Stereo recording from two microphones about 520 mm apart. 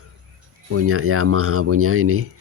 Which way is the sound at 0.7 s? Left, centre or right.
Right.